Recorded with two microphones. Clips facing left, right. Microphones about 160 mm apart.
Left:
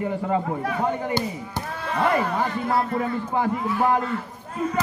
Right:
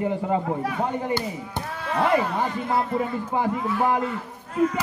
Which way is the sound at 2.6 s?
20° right (ahead or behind).